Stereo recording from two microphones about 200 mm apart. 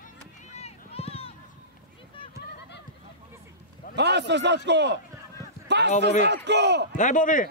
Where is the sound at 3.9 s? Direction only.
60° right (ahead or behind).